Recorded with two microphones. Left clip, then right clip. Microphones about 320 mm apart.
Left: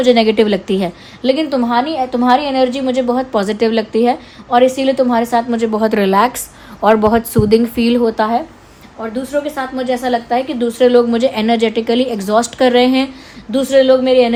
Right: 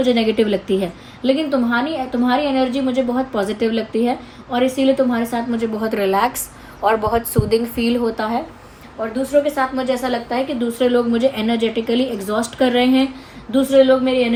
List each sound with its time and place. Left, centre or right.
0.0 s a woman's voice: left